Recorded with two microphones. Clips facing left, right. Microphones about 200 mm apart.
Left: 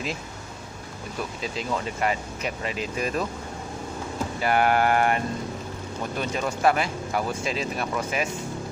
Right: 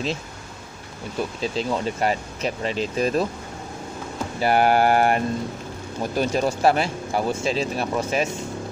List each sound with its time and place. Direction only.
1.4 s speech: 30° right (ahead or behind)
4.4 s speech: 35° right (ahead or behind)